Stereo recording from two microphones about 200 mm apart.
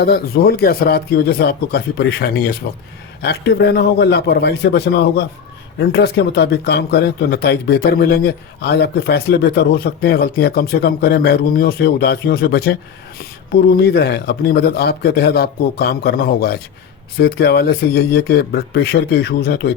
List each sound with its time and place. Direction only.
0.0 s a man's voice: 50° left (ahead or behind)